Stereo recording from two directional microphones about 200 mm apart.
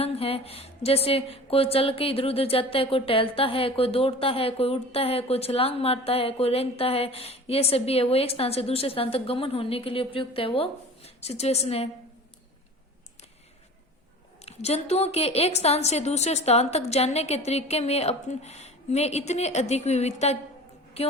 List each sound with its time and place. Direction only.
0.0 s speech: 30° left (ahead or behind)
14.4 s a woman's voice: 30° left (ahead or behind)